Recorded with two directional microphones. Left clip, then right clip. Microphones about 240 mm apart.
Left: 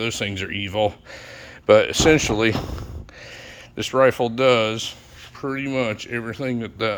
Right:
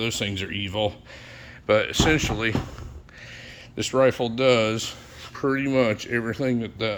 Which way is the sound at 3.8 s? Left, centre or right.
Centre.